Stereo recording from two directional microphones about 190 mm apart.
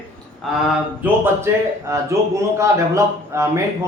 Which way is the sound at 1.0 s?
10° right (ahead or behind).